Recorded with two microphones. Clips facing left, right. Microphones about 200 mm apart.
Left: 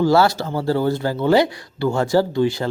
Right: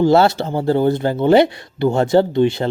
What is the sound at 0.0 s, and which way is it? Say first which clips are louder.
Speech: right 3 dB; 20° right (ahead or behind).